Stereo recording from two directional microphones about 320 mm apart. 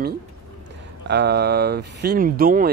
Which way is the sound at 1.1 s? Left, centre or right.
Right.